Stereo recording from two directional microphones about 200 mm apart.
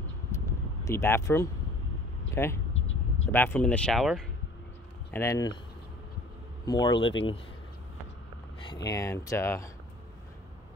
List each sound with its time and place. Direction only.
0.8 s speech: 15° left (ahead or behind)
5.1 s speech: 15° left (ahead or behind)
6.6 s speech: 20° left (ahead or behind)
8.8 s speech: 15° left (ahead or behind)